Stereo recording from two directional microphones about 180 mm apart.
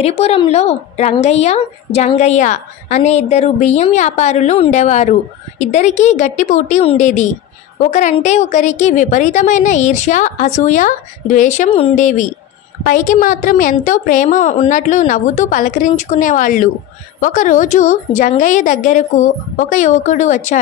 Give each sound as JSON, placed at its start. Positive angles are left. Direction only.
{"t": 0.0, "sound": "a woman's voice", "side_deg": 35}